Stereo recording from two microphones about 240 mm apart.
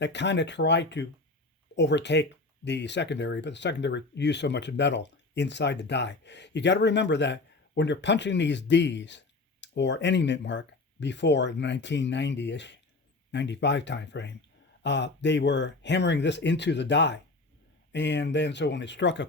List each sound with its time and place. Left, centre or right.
0.0 s speech: left